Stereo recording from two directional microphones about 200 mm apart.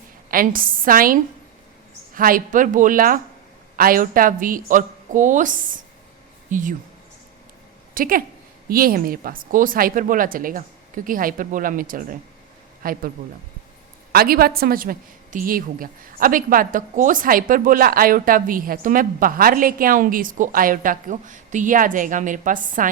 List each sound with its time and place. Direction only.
0.3 s a woman's voice: 45° right (ahead or behind)
7.9 s a woman's voice: 45° right (ahead or behind)
14.1 s a woman's voice: 50° right (ahead or behind)